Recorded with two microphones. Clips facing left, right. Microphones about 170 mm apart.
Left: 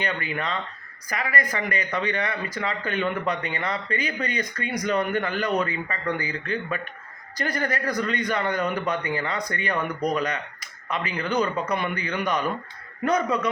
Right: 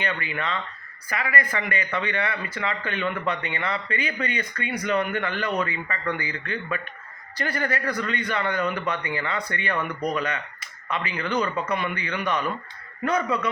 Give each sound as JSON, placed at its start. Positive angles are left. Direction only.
{"t": 0.0, "sound": "speech", "side_deg": 40}